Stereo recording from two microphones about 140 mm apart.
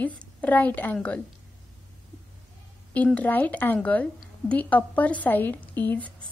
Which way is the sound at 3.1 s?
10° left (ahead or behind).